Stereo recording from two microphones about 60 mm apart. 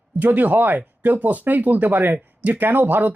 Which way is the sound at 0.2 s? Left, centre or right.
Right.